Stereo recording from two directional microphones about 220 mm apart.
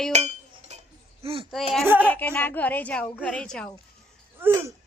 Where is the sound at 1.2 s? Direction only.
25° right (ahead or behind).